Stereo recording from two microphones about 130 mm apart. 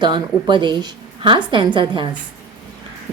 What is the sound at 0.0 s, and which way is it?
Speech, 35° right (ahead or behind).